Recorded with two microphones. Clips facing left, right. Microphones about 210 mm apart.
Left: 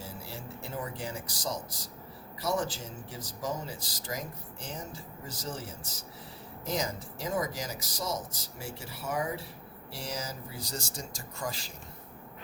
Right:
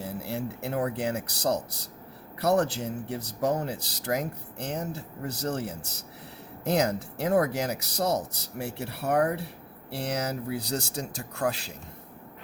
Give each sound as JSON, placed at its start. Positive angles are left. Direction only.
{"t": 0.0, "sound": "speech", "side_deg": -65}